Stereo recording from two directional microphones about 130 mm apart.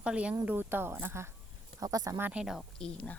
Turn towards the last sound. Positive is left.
turn(degrees=5)  # may be behind; listen again after turning